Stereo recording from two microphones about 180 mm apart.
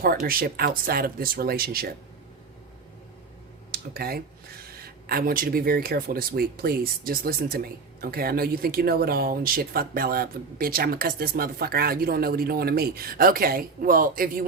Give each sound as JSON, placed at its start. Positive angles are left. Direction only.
{"t": 0.0, "sound": "speech", "side_deg": -55}
{"t": 3.7, "sound": "speech", "side_deg": -55}